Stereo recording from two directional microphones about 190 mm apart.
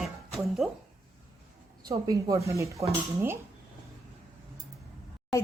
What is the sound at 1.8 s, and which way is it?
Speech, 20° right (ahead or behind).